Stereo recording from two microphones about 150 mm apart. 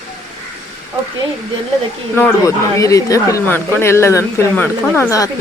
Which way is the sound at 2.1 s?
20° left (ahead or behind).